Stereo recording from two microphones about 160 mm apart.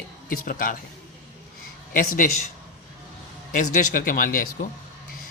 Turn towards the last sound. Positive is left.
turn(degrees=60)  # may be behind; listen again after turning